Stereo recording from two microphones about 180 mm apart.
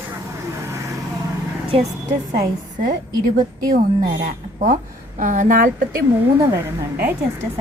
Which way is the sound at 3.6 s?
55° right (ahead or behind).